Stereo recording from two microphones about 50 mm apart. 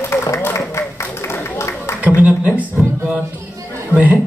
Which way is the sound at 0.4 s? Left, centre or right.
Left.